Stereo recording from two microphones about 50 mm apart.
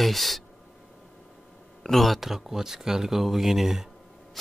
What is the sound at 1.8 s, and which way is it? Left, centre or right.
Speech, centre.